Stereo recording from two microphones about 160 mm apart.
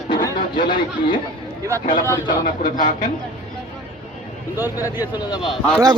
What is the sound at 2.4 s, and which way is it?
Speech, 60° left (ahead or behind).